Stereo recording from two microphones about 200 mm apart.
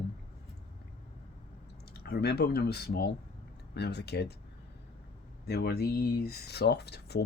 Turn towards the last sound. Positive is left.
turn(degrees=55)  # may be behind; listen again after turning